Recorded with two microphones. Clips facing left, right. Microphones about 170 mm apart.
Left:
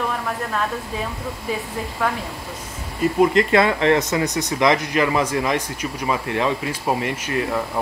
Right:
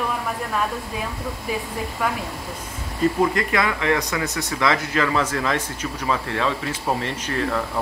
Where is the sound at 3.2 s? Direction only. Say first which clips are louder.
Left 5 dB; 25° left (ahead or behind).